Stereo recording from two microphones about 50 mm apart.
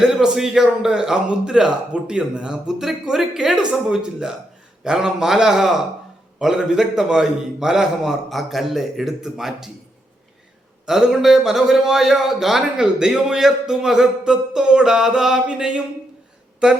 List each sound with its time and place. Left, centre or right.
0.0 s a man's voice: centre
8.3 s speech: centre
10.8 s a man's voice: centre